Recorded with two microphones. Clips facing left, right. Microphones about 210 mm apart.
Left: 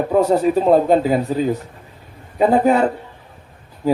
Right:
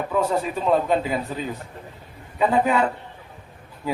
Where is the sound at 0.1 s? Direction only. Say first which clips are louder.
Left 9 dB; 40° left (ahead or behind).